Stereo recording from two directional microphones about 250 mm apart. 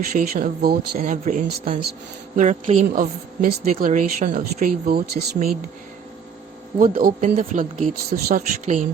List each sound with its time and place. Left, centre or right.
0.1 s speech: right
6.7 s speech: right